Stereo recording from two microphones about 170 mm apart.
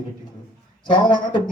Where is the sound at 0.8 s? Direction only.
30° left (ahead or behind).